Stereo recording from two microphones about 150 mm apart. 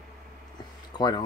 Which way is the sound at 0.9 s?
30° left (ahead or behind).